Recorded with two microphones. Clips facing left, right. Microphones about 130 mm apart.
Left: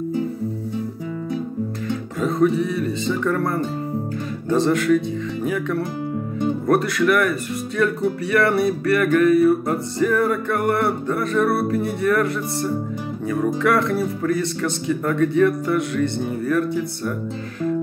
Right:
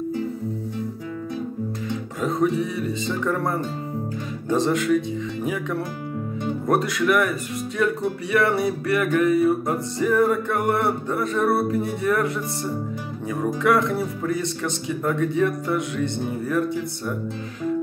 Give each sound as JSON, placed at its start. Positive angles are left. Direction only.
{"t": 2.1, "sound": "speech", "side_deg": -15}
{"t": 13.3, "sound": "speech", "side_deg": -15}